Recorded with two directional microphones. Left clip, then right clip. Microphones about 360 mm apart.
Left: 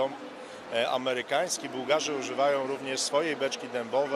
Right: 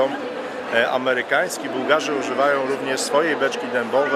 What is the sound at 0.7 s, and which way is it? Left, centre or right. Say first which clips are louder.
A man's voice: right 9 dB; left.